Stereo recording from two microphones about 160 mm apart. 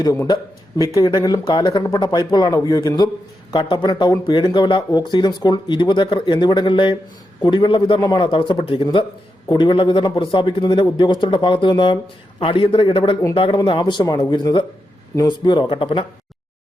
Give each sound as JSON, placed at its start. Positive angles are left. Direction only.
{"t": 0.0, "sound": "a man's voice", "side_deg": 20}